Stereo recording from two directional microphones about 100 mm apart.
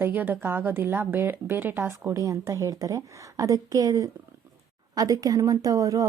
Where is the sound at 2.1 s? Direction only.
35° right (ahead or behind).